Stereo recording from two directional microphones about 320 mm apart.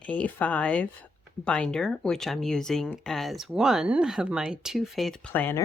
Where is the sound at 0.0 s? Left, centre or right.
Centre.